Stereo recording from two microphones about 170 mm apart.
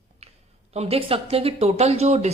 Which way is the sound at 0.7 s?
35° right (ahead or behind).